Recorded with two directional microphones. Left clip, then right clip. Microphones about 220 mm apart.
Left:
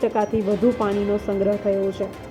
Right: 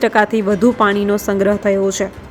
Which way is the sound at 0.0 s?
30° right (ahead or behind).